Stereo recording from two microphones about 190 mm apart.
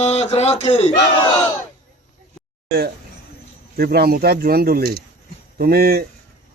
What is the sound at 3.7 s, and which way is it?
Speech, 55° right (ahead or behind).